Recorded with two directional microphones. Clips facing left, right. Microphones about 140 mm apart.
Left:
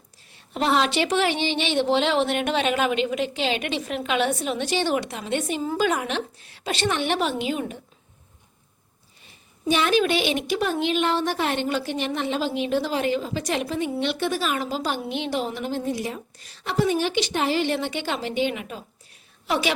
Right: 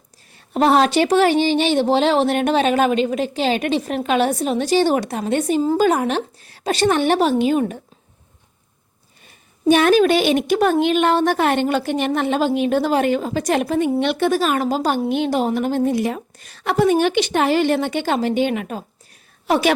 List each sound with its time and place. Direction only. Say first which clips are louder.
0.3 s speech: right 7 dB; 45° right (ahead or behind)
9.2 s a woman's voice: right 10 dB; 50° right (ahead or behind)